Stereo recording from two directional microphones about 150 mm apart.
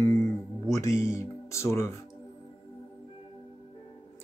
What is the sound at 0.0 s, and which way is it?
Music, 20° left (ahead or behind).